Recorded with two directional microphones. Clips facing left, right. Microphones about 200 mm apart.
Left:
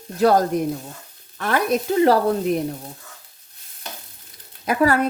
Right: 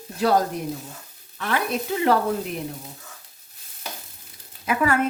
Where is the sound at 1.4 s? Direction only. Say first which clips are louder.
Left 5 dB; 45° left (ahead or behind).